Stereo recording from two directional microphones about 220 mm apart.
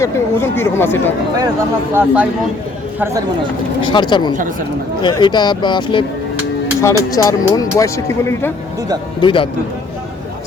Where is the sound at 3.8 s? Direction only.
20° left (ahead or behind).